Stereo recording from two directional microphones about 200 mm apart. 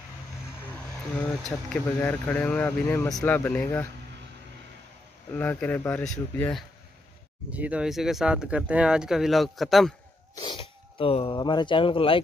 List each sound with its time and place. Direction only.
1.7 s speech: 10° left (ahead or behind)
5.3 s speech: 10° left (ahead or behind)
7.5 s speech: 5° right (ahead or behind)
10.3 s speech: 25° left (ahead or behind)